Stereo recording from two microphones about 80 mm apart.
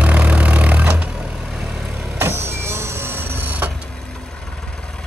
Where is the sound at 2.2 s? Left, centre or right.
Right.